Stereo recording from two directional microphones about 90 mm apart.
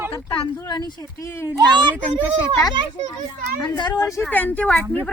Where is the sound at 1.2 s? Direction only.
30° left (ahead or behind).